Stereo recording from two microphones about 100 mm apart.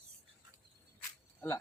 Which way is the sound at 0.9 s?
20° left (ahead or behind).